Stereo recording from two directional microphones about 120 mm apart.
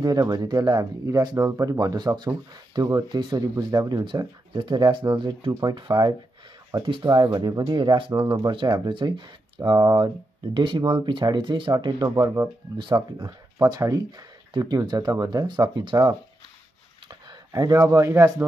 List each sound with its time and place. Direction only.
0.0 s speech: 35° right (ahead or behind)
17.1 s a sound: 35° right (ahead or behind)
17.8 s speech: 25° right (ahead or behind)